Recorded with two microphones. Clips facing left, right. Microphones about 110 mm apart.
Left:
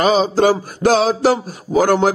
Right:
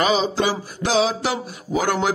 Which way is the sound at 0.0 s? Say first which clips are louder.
Left 6 dB; 45° left (ahead or behind).